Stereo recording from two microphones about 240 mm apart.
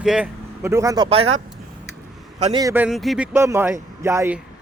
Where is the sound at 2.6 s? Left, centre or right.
Centre.